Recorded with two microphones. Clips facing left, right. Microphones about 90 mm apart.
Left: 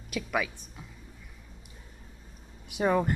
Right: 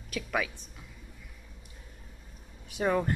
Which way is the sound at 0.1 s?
5° left (ahead or behind).